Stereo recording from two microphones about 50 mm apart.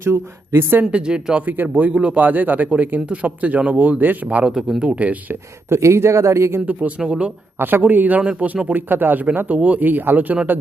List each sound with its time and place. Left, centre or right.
0.0 s a woman's voice: right
0.9 s speech: right
1.4 s speech: right
1.9 s speech: right
2.1 s speech: right
4.4 s speech: centre
5.6 s speech: right
7.0 s speech: centre
7.6 s speech: right
8.2 s speech: centre
8.6 s speech: right